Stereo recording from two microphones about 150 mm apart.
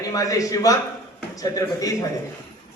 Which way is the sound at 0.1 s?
25° left (ahead or behind).